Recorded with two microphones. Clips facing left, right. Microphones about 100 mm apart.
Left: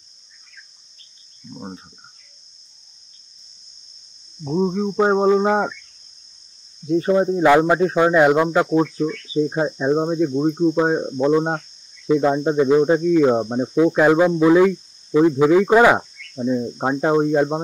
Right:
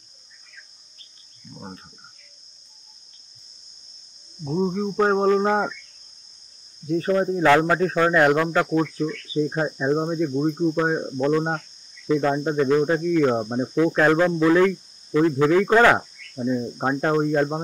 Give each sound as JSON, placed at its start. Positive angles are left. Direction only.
{"t": 1.5, "sound": "speech", "side_deg": 10}
{"t": 4.5, "sound": "speech", "side_deg": 20}
{"t": 6.9, "sound": "speech", "side_deg": 15}